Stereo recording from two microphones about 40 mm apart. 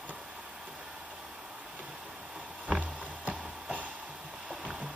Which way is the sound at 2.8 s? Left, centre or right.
Right.